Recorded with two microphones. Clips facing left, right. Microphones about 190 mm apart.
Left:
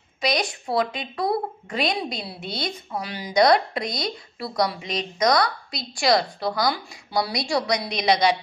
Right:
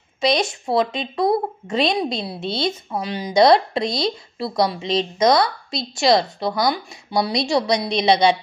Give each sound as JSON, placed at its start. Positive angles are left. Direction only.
{"t": 0.2, "sound": "a woman's voice", "side_deg": -25}